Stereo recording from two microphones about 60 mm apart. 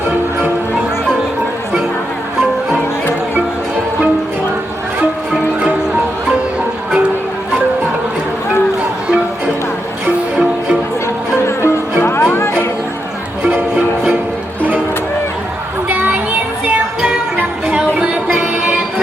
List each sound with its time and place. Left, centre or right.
11.4 s music: left
13.4 s music: right
15.9 s child singing: right
18.3 s music: centre